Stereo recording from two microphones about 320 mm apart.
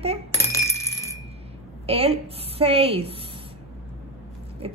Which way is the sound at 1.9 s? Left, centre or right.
Centre.